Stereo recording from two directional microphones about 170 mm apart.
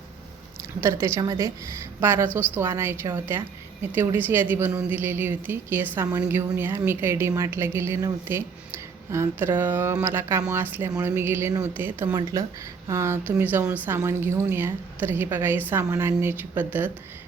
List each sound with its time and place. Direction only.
0.8 s speech: 15° right (ahead or behind)